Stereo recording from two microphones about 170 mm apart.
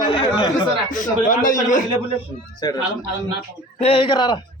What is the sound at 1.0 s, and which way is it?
Speech, 50° left (ahead or behind).